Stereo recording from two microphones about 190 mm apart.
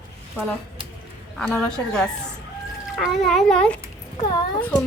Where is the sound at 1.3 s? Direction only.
5° left (ahead or behind).